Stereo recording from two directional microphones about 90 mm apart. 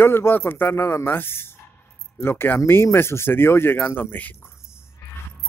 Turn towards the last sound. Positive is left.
turn(degrees=20)  # may be behind; listen again after turning